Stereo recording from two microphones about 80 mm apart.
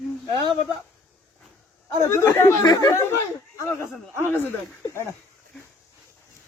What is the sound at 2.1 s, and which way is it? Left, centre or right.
Speech, left.